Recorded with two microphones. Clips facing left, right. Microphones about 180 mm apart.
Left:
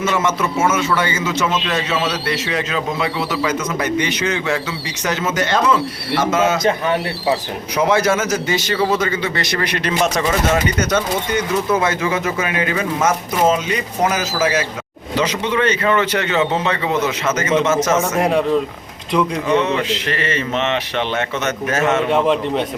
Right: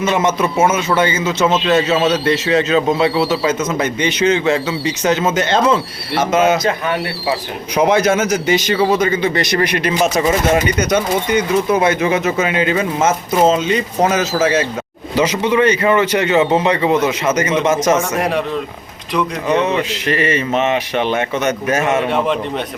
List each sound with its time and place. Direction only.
0.0 s a man's voice: 20° right (ahead or behind)
6.6 s speech: 25° left (ahead or behind)
7.8 s a man's voice: 20° right (ahead or behind)
15.2 s a man's voice: 10° right (ahead or behind)
19.6 s a man's voice: 15° right (ahead or behind)